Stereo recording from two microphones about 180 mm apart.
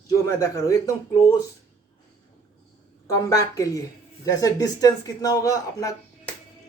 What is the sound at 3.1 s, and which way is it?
Speech, 20° left (ahead or behind).